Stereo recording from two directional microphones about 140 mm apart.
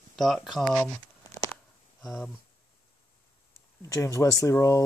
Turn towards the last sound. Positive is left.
turn(degrees=20)  # may be behind; listen again after turning